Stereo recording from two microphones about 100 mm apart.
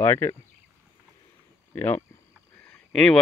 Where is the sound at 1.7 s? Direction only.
20° left (ahead or behind).